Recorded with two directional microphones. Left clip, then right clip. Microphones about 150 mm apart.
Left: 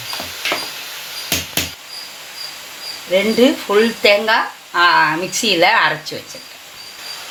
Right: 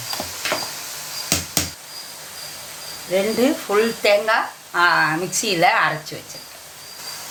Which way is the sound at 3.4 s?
45° left (ahead or behind).